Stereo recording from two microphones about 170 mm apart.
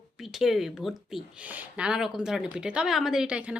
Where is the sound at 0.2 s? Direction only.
Centre (ahead or behind).